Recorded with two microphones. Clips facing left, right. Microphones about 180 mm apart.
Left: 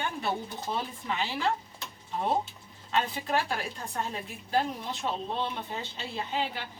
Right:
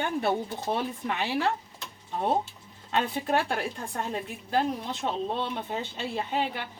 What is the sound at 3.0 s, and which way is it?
Speech, 50° right (ahead or behind).